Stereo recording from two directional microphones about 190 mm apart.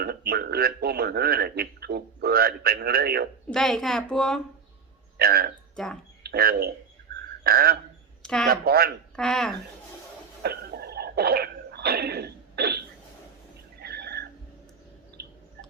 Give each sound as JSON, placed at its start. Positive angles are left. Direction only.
{"t": 0.0, "sound": "a man's voice", "side_deg": -55}
{"t": 3.5, "sound": "a child's voice", "side_deg": 0}
{"t": 5.1, "sound": "a man's voice", "side_deg": -55}
{"t": 5.7, "sound": "speech", "side_deg": 5}
{"t": 6.2, "sound": "speech", "side_deg": -55}
{"t": 8.2, "sound": "speech", "side_deg": 5}
{"t": 8.4, "sound": "speech", "side_deg": -55}
{"t": 9.1, "sound": "a child's voice", "side_deg": 5}
{"t": 10.4, "sound": "throat clearing", "side_deg": -55}
{"t": 13.8, "sound": "a sound", "side_deg": -60}